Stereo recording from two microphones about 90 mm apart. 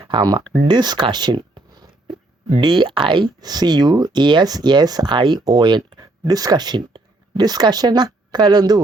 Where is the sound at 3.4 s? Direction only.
50° right (ahead or behind).